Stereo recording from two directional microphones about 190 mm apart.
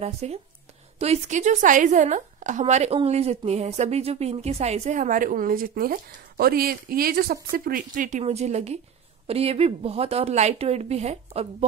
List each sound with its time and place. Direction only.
0.0 s a woman's voice: 35° right (ahead or behind)